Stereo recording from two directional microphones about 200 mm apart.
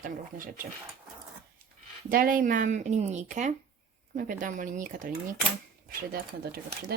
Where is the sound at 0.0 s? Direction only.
45° right (ahead or behind).